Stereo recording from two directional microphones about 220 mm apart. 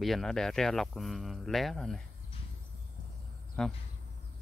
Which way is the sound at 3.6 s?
5° left (ahead or behind).